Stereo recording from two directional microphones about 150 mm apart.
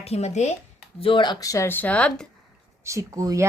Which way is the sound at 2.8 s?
20° right (ahead or behind).